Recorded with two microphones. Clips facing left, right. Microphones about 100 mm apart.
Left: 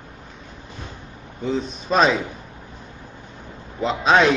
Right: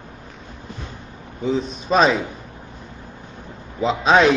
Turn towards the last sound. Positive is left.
turn(degrees=0)  # may be behind; listen again after turning